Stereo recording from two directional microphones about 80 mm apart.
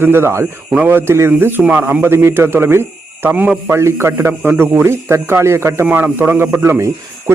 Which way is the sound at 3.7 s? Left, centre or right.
Right.